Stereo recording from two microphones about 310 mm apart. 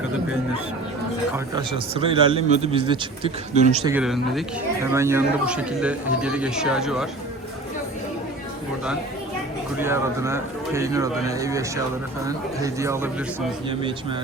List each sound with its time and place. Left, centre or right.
1.5 s a man's voice: centre
3.9 s speech: centre
9.7 s a man's voice: centre